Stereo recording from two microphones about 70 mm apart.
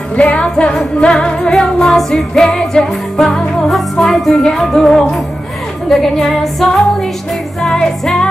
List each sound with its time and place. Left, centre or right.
0.2 s music: centre